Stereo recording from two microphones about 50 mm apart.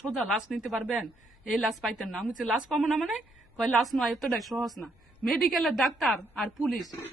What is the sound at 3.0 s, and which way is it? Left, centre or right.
Speech, right.